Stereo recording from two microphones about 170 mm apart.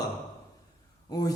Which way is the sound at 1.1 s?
20° left (ahead or behind).